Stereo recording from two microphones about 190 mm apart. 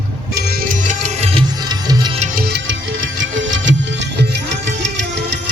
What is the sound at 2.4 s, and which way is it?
Music, 65° right (ahead or behind).